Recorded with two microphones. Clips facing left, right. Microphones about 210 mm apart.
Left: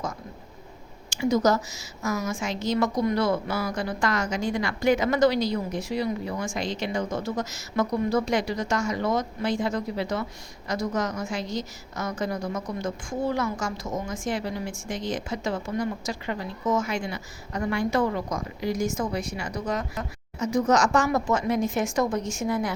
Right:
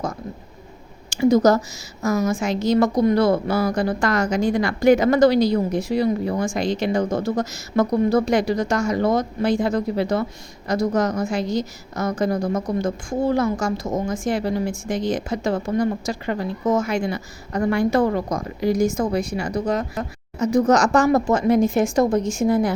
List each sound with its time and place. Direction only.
1.1 s a sound: 35° right (ahead or behind)
1.5 s a woman's voice: 35° right (ahead or behind); by 7.2 s 55° right (ahead or behind)
7.8 s a woman's voice: 35° right (ahead or behind)
9.6 s a woman's voice: 45° right (ahead or behind)
15.4 s a woman's voice: 50° right (ahead or behind)
15.7 s a woman's voice: 35° right (ahead or behind)
19.1 s a woman's voice: 35° right (ahead or behind)
20.4 s speech: 60° right (ahead or behind)
20.9 s a woman's voice: 35° right (ahead or behind)